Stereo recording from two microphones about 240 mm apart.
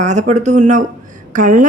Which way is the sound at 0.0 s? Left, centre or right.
Right.